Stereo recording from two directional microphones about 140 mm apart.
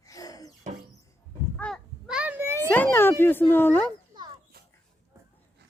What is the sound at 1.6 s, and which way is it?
Speech, 10° left (ahead or behind).